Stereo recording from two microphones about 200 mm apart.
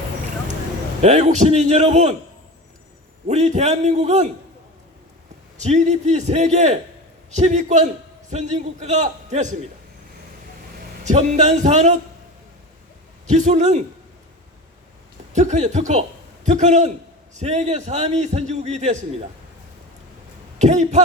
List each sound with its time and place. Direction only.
1.0 s a man's voice: 35° right (ahead or behind)
3.2 s a man's voice: 35° right (ahead or behind)
5.5 s a man's voice: 35° right (ahead or behind)
11.0 s a man's voice: 35° right (ahead or behind)
13.2 s a man's voice: 35° right (ahead or behind)
15.3 s a man's voice: 35° right (ahead or behind)
20.6 s a man's voice: 35° right (ahead or behind)